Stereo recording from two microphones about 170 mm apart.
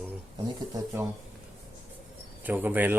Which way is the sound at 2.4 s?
10° right (ahead or behind).